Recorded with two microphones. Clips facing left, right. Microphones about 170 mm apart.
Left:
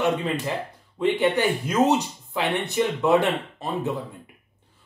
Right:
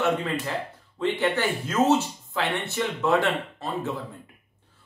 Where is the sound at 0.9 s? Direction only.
15° left (ahead or behind).